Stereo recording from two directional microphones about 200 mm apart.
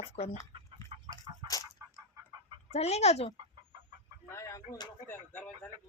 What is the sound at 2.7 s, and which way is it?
Speech, 35° left (ahead or behind).